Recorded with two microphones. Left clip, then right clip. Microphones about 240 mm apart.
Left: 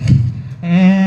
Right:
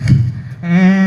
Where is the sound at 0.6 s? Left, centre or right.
Left.